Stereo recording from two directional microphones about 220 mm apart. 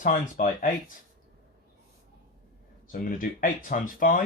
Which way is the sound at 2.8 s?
40° left (ahead or behind).